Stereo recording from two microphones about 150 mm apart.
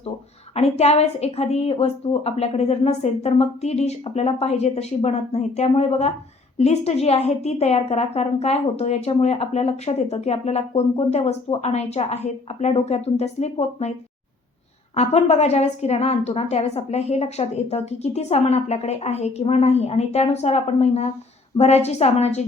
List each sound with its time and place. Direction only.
0.5 s a woman's voice: 45° left (ahead or behind)
14.9 s a woman's voice: 45° left (ahead or behind)